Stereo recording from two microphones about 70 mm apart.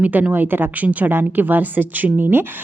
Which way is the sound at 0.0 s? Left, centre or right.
Right.